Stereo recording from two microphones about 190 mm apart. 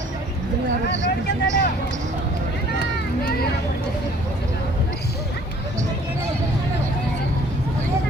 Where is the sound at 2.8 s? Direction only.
55° left (ahead or behind).